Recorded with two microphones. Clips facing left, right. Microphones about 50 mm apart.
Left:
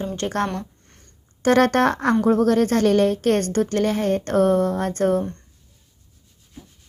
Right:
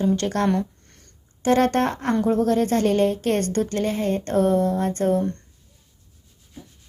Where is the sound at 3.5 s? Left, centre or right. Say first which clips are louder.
Left 2 dB; left.